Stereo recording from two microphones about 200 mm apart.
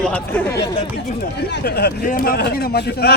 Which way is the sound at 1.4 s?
55° left (ahead or behind).